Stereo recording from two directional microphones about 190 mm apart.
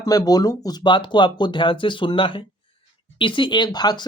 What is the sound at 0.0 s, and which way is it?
Speech, 20° left (ahead or behind).